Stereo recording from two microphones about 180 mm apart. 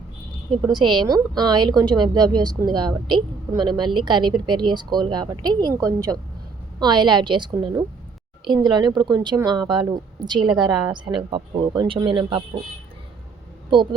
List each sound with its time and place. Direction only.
0.5 s speech: 25° right (ahead or behind)